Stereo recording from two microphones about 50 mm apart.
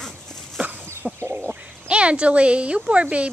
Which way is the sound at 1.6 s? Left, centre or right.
Right.